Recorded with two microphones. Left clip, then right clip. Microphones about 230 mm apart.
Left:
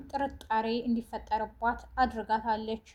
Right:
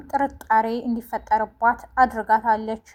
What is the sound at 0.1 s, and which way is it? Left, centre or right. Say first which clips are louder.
A woman's voice: right 11 dB; right.